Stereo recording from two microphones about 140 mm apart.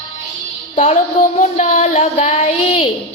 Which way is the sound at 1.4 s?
55° left (ahead or behind).